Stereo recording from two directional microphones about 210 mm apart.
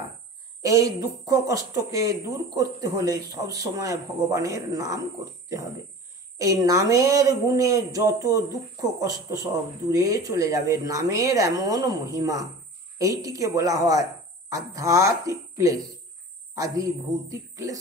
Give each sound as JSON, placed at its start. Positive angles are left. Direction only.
{"t": 0.6, "sound": "speech", "side_deg": -15}
{"t": 6.3, "sound": "a woman's voice", "side_deg": -15}